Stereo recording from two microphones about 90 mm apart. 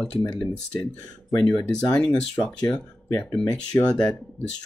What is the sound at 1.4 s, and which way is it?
Speech, 10° left (ahead or behind).